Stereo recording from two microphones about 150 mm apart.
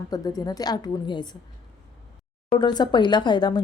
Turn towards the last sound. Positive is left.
turn(degrees=30)  # may be behind; listen again after turning